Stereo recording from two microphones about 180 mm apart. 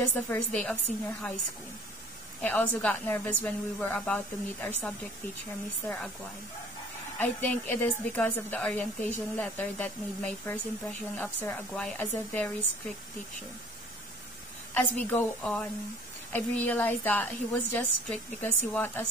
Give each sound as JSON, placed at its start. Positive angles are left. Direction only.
{"t": 0.1, "sound": "a woman's voice", "side_deg": 10}
{"t": 2.4, "sound": "a woman's voice", "side_deg": 10}
{"t": 5.9, "sound": "speech", "side_deg": 5}
{"t": 7.2, "sound": "a woman's voice", "side_deg": 10}
{"t": 14.7, "sound": "a woman's voice", "side_deg": 10}